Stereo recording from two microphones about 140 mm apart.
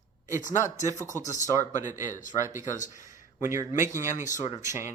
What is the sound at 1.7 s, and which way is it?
Speech, 65° left (ahead or behind).